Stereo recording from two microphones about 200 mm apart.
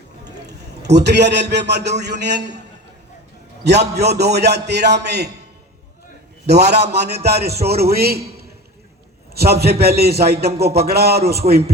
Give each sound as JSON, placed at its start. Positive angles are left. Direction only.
{"t": 0.3, "sound": "a sound", "side_deg": -55}
{"t": 0.9, "sound": "a man's voice", "side_deg": -55}
{"t": 3.6, "sound": "a man's voice", "side_deg": -55}
{"t": 6.4, "sound": "a man's voice", "side_deg": -55}